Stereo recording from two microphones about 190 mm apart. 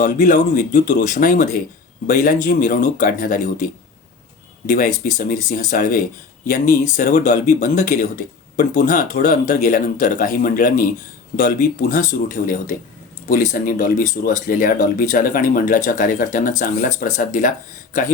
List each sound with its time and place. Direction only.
0.0 s speech: 45° left (ahead or behind)
13.2 s speech: 40° left (ahead or behind)